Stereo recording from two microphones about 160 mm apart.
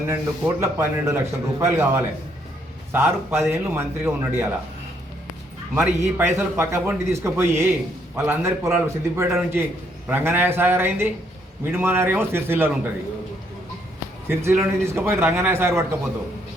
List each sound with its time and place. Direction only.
0.1 s a man's voice: 15° right (ahead or behind)
5.7 s a man's voice: 10° right (ahead or behind)
14.3 s a man's voice: 15° right (ahead or behind)